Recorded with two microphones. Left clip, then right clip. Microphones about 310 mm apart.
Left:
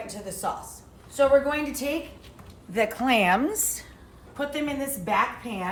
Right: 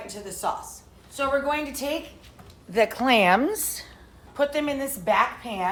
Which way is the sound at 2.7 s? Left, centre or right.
Right.